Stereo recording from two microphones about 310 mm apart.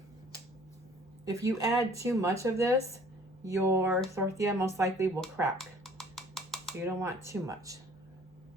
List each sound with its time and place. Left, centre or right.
1.2 s speech: centre
5.5 s dishes: centre
6.8 s speech: centre